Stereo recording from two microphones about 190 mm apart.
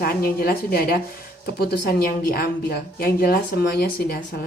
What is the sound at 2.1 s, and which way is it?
Speech, 50° left (ahead or behind).